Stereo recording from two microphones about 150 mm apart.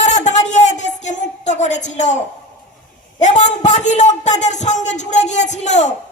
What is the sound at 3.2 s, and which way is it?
A woman's voice, 55° left (ahead or behind).